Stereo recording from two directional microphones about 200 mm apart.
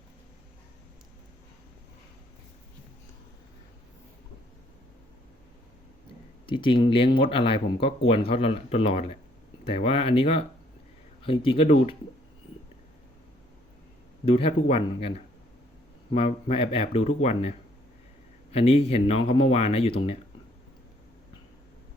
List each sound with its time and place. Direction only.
6.4 s speech: 25° left (ahead or behind)
14.3 s speech: 30° left (ahead or behind)
18.5 s speech: 30° left (ahead or behind)